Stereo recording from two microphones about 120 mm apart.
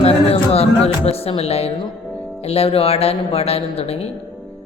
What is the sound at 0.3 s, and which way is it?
Music, 55° left (ahead or behind).